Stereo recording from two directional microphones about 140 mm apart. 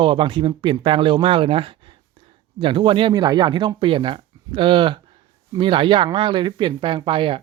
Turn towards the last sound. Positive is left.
turn(degrees=-35)  # may be behind; listen again after turning